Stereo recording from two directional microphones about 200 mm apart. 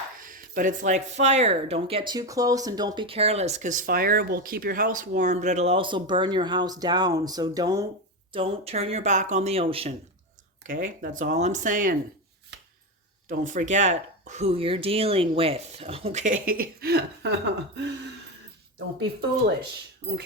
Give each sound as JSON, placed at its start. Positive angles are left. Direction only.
{"t": 0.2, "sound": "speech", "side_deg": -45}
{"t": 10.7, "sound": "speech", "side_deg": -45}
{"t": 13.2, "sound": "speech", "side_deg": -40}
{"t": 20.0, "sound": "speech", "side_deg": -55}